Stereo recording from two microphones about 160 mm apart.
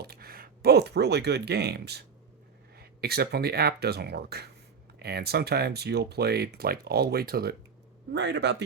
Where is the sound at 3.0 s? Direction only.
80° right.